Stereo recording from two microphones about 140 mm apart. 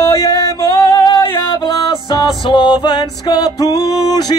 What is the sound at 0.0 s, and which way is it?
Music, 25° left (ahead or behind).